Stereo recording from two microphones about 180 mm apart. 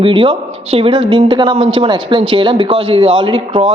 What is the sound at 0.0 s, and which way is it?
Speech, 30° right (ahead or behind).